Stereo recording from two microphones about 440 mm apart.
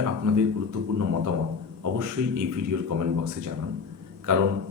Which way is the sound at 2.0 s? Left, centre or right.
Right.